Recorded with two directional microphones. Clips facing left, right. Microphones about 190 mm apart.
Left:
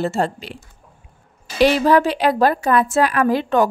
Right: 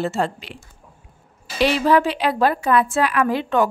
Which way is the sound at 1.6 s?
45° left (ahead or behind).